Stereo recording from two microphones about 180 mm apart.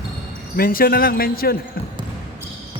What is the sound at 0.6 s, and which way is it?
Speech, 55° left (ahead or behind).